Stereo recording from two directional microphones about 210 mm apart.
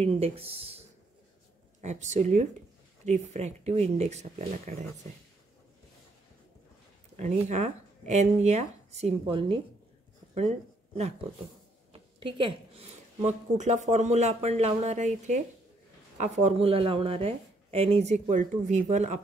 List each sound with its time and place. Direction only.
0.0 s speech: 30° right (ahead or behind)
7.2 s speech: 35° right (ahead or behind)
11.9 s speech: 25° right (ahead or behind)